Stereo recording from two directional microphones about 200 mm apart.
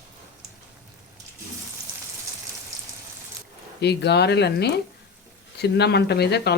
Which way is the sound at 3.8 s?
55° left (ahead or behind).